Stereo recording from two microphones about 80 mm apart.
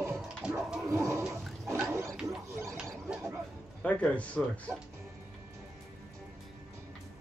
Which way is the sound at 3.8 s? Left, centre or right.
Centre.